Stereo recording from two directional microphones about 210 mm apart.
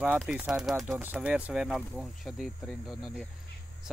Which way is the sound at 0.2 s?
5° right (ahead or behind).